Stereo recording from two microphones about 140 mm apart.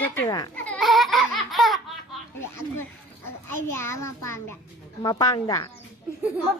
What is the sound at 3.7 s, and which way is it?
Speech, 20° left (ahead or behind).